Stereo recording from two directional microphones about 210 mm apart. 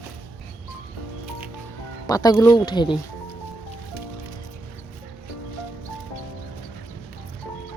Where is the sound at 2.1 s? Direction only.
20° left (ahead or behind).